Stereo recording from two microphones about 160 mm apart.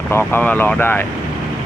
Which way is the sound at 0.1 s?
15° left (ahead or behind).